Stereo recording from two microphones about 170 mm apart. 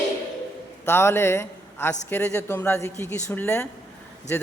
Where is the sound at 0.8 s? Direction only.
15° left (ahead or behind).